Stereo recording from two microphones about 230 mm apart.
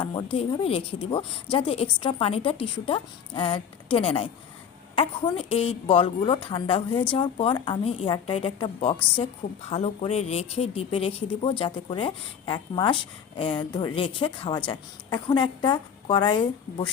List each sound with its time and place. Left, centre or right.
0.0 s speech: centre